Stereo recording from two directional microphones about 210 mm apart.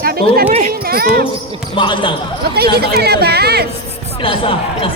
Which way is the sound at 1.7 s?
25° left (ahead or behind).